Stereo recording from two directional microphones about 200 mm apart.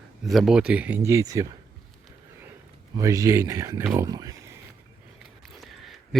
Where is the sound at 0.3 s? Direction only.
Centre (ahead or behind).